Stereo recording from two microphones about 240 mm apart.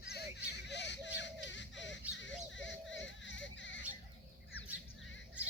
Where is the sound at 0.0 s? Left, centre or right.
Left.